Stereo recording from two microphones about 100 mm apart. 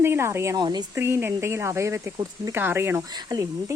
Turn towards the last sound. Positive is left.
turn(degrees=-35)  # may be behind; listen again after turning